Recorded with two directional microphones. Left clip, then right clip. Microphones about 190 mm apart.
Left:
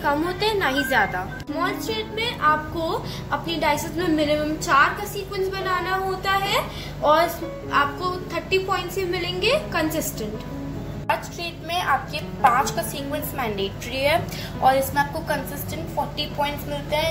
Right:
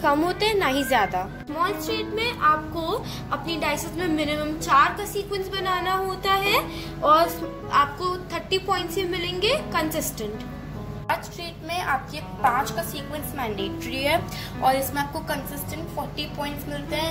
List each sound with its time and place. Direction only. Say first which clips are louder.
0.0 s a woman's voice: right 1 dB; 30° right (ahead or behind)
11.7 s a woman's voice: left 3 dB; centre (ahead or behind); by 15.3 s 20° right (ahead or behind)